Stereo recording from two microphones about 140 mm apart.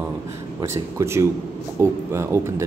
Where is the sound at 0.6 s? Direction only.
20° right (ahead or behind).